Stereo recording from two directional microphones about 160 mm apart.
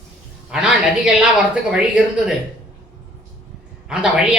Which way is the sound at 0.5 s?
5° right (ahead or behind).